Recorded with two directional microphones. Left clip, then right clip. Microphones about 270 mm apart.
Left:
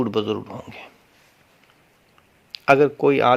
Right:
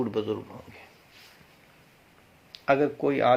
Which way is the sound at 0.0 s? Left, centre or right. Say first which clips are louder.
Left 6 dB; left.